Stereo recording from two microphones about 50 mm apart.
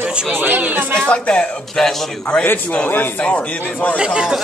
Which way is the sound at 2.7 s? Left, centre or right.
Left.